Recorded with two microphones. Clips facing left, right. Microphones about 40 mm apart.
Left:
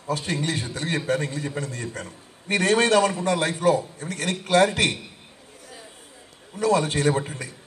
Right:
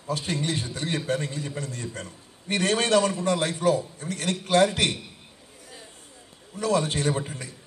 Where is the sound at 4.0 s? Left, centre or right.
Left.